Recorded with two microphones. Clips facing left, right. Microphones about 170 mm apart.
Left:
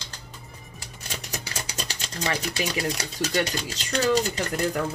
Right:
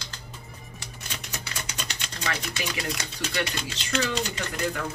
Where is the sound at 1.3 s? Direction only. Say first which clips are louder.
Left 2 dB; 35° left (ahead or behind).